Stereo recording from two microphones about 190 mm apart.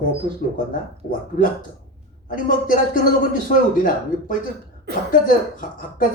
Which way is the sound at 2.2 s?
45° left (ahead or behind).